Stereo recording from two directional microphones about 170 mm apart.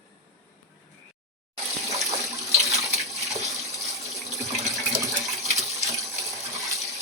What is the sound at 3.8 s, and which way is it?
Water tap, centre (ahead or behind).